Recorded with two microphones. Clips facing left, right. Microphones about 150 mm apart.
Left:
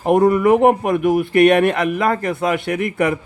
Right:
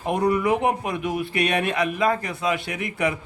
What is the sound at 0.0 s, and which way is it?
Speech, 50° left (ahead or behind).